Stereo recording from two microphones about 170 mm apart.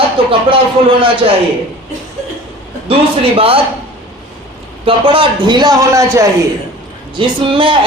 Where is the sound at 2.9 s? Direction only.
35° right (ahead or behind).